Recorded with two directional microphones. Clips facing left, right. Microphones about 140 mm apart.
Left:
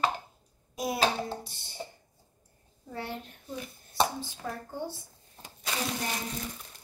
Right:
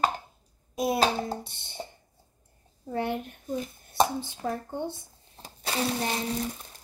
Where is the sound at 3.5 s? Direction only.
45° right (ahead or behind).